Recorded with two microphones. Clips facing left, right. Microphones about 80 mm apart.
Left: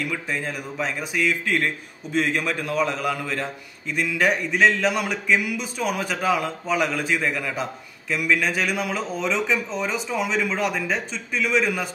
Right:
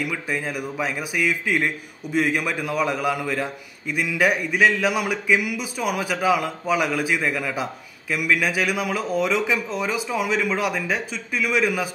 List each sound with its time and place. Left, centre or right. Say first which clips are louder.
0.0 s a man's voice: right 1 dB; centre